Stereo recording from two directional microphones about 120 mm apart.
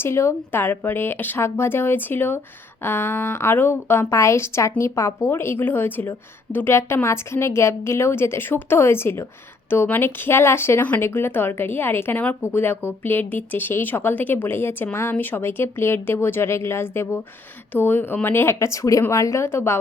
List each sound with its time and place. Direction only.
0.0 s speech: 20° left (ahead or behind)